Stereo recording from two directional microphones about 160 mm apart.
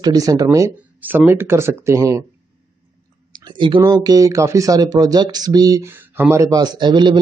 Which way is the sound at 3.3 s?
30° right (ahead or behind).